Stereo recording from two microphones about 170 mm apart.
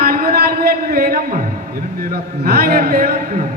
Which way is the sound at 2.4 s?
65° right (ahead or behind).